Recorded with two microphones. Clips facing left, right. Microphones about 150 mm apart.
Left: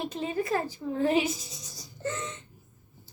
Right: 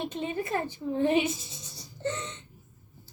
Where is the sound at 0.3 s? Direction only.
25° right (ahead or behind).